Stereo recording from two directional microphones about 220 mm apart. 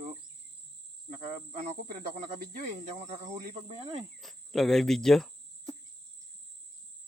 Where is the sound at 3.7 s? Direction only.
25° right (ahead or behind).